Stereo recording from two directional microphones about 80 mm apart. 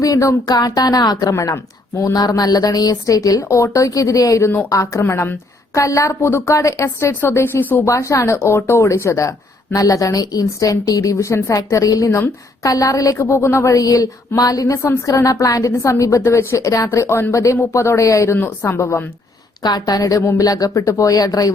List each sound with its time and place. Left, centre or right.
0.0 s a woman's voice: left
0.5 s a woman's voice: left
1.3 s speech: left
2.1 s a woman's voice: left
7.9 s a woman's voice: left
18.3 s speech: left
19.6 s a woman's voice: left